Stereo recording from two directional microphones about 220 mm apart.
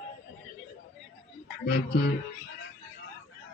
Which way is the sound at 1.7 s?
50° left (ahead or behind).